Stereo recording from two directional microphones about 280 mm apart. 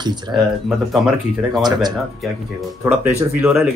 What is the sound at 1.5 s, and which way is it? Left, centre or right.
Speech, centre.